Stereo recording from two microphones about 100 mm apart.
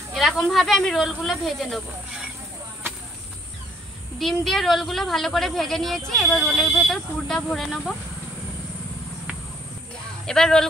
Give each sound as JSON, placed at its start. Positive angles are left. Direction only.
{"t": 0.1, "sound": "speech", "side_deg": 0}
{"t": 4.2, "sound": "speech", "side_deg": 0}
{"t": 10.2, "sound": "speech", "side_deg": 5}